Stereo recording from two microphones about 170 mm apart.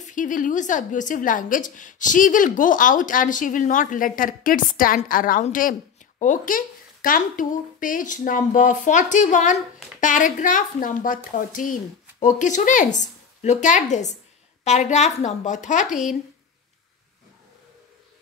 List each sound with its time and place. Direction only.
0.0 s a woman's voice: 50° left (ahead or behind)
15.9 s speech: centre (ahead or behind)